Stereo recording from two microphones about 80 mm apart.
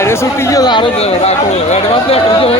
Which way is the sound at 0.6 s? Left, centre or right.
Left.